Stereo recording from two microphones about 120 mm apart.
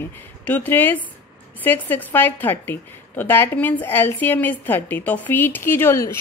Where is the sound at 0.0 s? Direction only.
15° left (ahead or behind).